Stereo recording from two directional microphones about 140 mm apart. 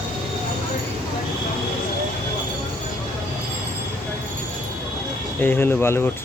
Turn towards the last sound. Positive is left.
turn(degrees=15)  # may be behind; listen again after turning